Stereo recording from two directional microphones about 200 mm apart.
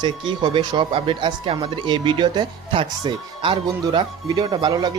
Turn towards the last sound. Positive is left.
turn(degrees=-20)  # may be behind; listen again after turning